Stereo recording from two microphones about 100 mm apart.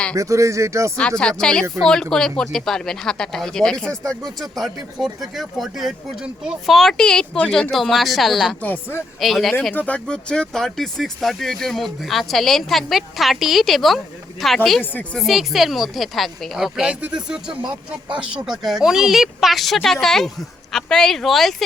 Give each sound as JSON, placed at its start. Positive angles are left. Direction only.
{"t": 0.2, "sound": "speech", "side_deg": -30}
{"t": 0.9, "sound": "speech", "side_deg": 10}
{"t": 6.7, "sound": "speech", "side_deg": 5}
{"t": 8.6, "sound": "speech", "side_deg": 20}
{"t": 9.2, "sound": "speech", "side_deg": 0}
{"t": 9.7, "sound": "speech", "side_deg": 15}
{"t": 17.6, "sound": "speech", "side_deg": -50}
{"t": 18.3, "sound": "speech", "side_deg": -5}